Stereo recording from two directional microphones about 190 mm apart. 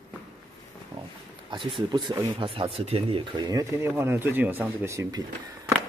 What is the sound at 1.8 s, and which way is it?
Speech, 25° right (ahead or behind).